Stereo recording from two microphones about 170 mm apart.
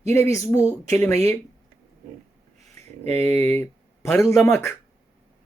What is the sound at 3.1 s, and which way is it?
Speech, 15° left (ahead or behind).